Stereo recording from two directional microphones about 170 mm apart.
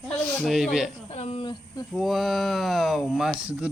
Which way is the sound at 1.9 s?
Centre (ahead or behind).